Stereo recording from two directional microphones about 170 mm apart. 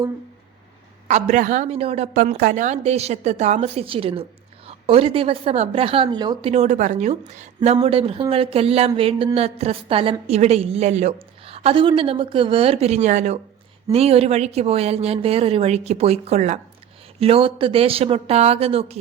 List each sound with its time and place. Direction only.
1.0 s speech: 45° right (ahead or behind)
2.1 s a woman's voice: 55° right (ahead or behind); by 6.5 s 25° right (ahead or behind)
6.5 s a woman's voice: 45° right (ahead or behind)